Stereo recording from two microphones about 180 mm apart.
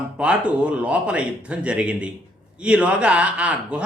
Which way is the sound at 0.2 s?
5° right (ahead or behind).